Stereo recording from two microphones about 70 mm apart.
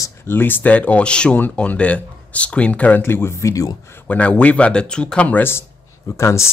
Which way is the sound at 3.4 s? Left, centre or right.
Left.